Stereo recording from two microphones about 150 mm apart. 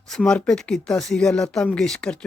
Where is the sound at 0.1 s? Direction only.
5° left (ahead or behind).